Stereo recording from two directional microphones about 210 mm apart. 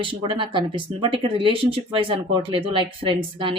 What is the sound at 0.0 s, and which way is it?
Speech, 25° right (ahead or behind).